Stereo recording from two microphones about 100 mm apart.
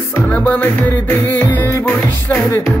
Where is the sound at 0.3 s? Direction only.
15° left (ahead or behind).